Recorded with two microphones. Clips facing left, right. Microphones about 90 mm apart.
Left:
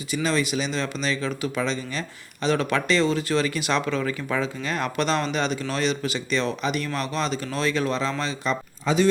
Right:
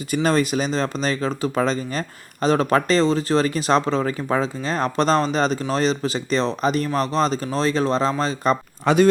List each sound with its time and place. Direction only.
0.1 s speech: 45° right (ahead or behind)
8.8 s speech: 60° right (ahead or behind)